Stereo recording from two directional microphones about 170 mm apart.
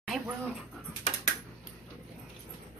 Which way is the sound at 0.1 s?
Centre (ahead or behind).